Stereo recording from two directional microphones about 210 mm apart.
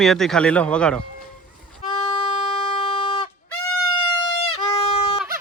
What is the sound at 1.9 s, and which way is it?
Music, 25° left (ahead or behind).